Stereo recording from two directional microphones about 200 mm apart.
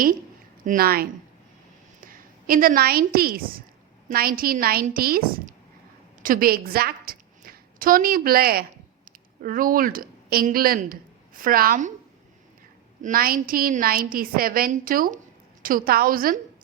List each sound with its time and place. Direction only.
0.6 s a woman's voice: 45° right (ahead or behind)
2.0 s a woman's voice: 45° right (ahead or behind)
13.0 s a woman's voice: 45° right (ahead or behind)